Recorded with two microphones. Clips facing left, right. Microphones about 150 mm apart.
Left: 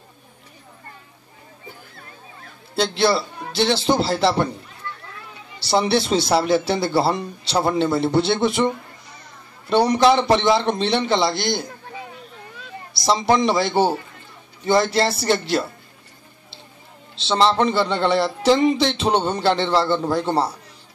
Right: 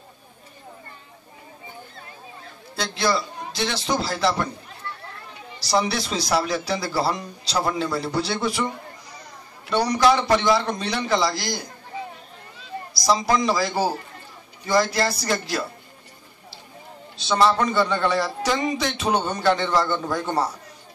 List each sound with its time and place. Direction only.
2.7 s a man's voice: 30° left (ahead or behind)
5.6 s a man's voice: 25° left (ahead or behind)
13.0 s a man's voice: 25° left (ahead or behind)
17.1 s a man's voice: 25° left (ahead or behind)